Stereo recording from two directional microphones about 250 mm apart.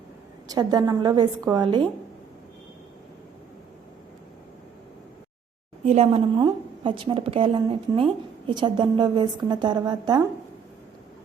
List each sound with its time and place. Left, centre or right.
0.4 s a woman's voice: centre
5.8 s a woman's voice: right